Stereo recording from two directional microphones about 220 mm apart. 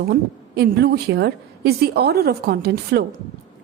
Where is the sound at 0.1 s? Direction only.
45° right (ahead or behind).